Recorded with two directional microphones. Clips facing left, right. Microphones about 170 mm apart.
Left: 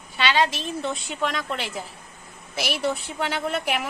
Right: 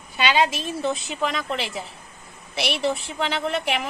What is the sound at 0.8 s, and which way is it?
A woman's voice, centre (ahead or behind).